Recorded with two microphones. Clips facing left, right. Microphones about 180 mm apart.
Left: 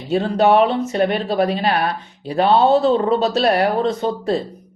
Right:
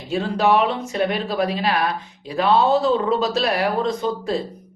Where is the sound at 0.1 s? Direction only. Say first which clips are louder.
Left 4 dB; 35° left (ahead or behind).